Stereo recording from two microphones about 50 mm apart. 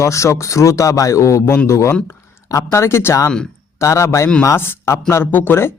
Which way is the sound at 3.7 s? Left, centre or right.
Left.